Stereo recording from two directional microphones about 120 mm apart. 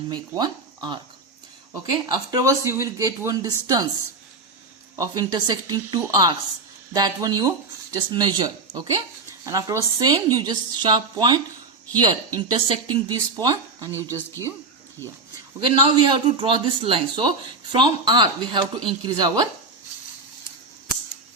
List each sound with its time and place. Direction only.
0.1 s speech: 35° right (ahead or behind)
2.1 s speech: 30° right (ahead or behind)
4.9 s speech: 35° right (ahead or behind)
12.5 s speech: 45° right (ahead or behind)
13.3 s speech: 30° right (ahead or behind)
15.6 s speech: 40° right (ahead or behind)